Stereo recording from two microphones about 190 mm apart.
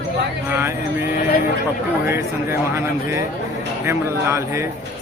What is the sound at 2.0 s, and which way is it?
A man's voice, 15° right (ahead or behind).